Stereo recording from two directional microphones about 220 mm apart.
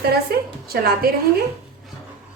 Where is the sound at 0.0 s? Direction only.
45° right (ahead or behind).